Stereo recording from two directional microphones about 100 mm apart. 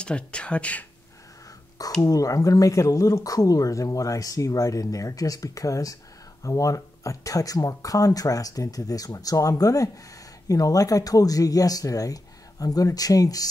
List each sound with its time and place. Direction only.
0.0 s speech: 10° left (ahead or behind)
2.0 s speech: 35° left (ahead or behind)